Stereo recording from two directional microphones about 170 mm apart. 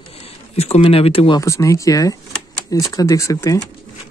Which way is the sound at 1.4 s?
20° left (ahead or behind).